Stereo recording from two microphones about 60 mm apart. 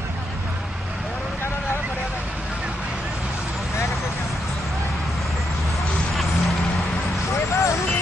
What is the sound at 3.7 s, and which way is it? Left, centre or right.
Vehicle, left.